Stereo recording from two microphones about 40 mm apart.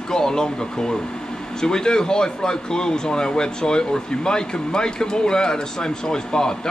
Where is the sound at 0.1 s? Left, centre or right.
Centre.